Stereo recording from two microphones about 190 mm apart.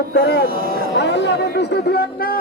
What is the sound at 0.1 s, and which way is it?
Speech, 65° left (ahead or behind).